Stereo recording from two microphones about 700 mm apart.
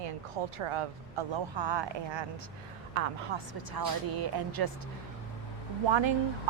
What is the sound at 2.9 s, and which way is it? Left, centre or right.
Speech, right.